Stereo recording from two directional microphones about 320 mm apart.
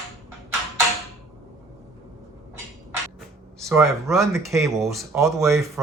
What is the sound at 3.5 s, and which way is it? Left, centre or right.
Speech, centre.